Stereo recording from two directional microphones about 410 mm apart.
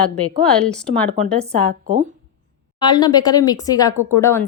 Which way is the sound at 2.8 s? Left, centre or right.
Centre.